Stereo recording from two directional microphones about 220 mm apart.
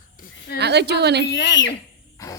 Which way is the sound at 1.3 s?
55° left (ahead or behind).